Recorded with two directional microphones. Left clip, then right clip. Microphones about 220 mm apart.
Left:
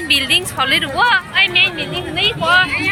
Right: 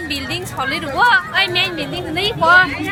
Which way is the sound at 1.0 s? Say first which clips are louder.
Right 2 dB; 15° right (ahead or behind).